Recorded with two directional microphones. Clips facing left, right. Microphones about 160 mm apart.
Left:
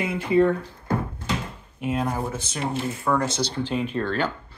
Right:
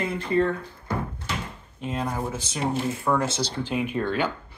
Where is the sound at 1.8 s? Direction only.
5° left (ahead or behind).